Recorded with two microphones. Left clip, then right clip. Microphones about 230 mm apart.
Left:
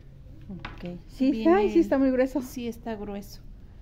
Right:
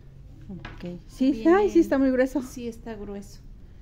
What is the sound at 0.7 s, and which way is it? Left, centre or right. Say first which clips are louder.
Speech: right 2 dB; centre.